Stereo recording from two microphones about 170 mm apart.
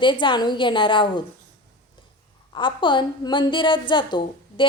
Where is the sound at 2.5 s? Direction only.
30° left (ahead or behind).